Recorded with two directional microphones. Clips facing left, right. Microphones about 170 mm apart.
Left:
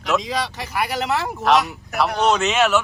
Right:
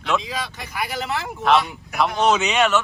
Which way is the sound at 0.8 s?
65° left (ahead or behind).